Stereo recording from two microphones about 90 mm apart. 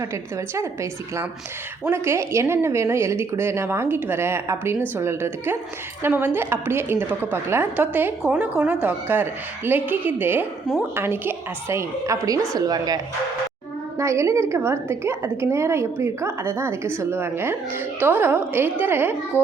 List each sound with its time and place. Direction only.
0.5 s a woman's voice: 35° right (ahead or behind)
14.0 s a woman's voice: 30° right (ahead or behind)